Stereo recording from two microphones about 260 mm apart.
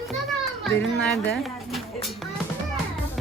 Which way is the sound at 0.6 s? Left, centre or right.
Centre.